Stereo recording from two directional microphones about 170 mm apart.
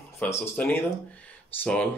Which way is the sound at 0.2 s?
10° left (ahead or behind).